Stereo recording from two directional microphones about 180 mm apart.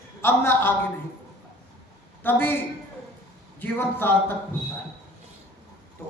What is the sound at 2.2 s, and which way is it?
Speech, 10° left (ahead or behind).